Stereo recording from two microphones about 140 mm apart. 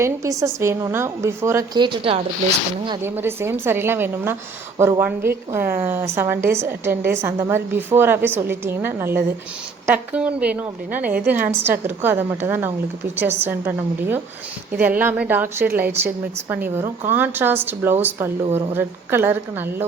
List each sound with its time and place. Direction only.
0.0 s a woman's voice: 20° right (ahead or behind)
1.8 s speech: 35° right (ahead or behind)
3.0 s a woman's voice: 15° right (ahead or behind)